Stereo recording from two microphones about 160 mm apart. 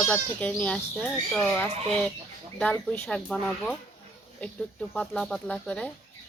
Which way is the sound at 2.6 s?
10° left (ahead or behind).